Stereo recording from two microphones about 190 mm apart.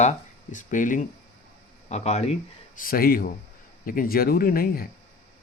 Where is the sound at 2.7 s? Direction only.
50° left (ahead or behind).